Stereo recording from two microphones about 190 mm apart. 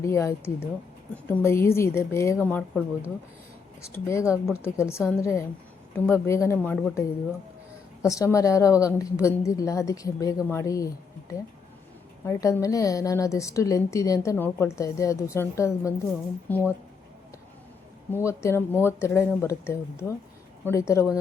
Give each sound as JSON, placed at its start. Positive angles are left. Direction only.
{"t": 0.0, "sound": "a woman's voice", "side_deg": 15}
{"t": 8.0, "sound": "a woman's voice", "side_deg": 15}
{"t": 12.2, "sound": "a woman's voice", "side_deg": 15}
{"t": 18.1, "sound": "a woman's voice", "side_deg": 15}